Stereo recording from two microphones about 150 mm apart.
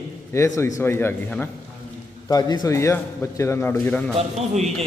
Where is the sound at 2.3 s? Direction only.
25° left (ahead or behind).